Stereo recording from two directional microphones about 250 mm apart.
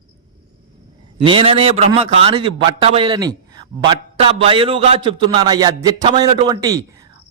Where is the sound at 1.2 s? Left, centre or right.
Centre.